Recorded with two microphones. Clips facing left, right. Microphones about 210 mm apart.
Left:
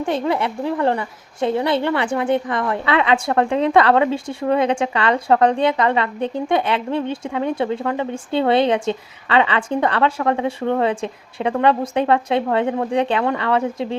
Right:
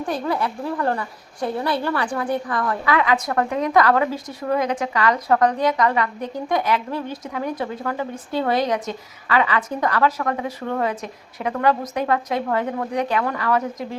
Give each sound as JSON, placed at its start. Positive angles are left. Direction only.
{"t": 0.0, "sound": "a woman's voice", "side_deg": 25}